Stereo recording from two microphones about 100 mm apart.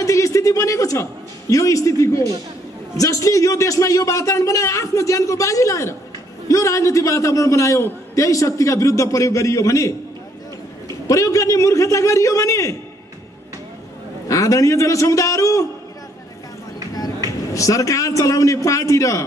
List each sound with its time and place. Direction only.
0.0 s a sound: 35° left (ahead or behind)
1.5 s a man's voice: 35° left (ahead or behind)
11.1 s a man's voice: 30° left (ahead or behind)
14.2 s a man's voice: 35° left (ahead or behind)
17.6 s a man's voice: 35° left (ahead or behind)